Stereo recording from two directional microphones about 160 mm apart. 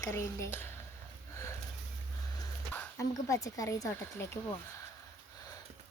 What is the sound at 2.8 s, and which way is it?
Speech, 20° left (ahead or behind).